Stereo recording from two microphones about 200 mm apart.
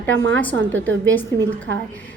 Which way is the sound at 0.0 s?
10° left (ahead or behind).